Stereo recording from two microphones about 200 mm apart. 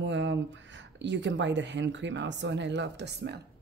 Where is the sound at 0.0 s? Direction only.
65° right (ahead or behind).